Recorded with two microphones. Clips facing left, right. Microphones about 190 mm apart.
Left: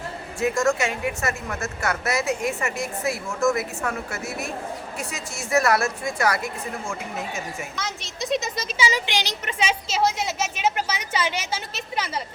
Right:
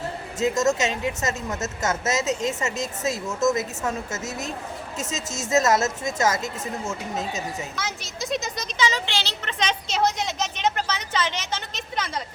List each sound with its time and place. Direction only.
0.3 s a woman's voice: 20° right (ahead or behind)
7.8 s a woman's voice: centre (ahead or behind)